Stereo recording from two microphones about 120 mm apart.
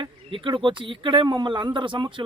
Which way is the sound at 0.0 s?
45° right (ahead or behind).